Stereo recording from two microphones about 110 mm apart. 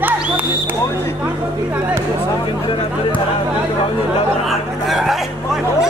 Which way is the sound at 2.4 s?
45° left (ahead or behind).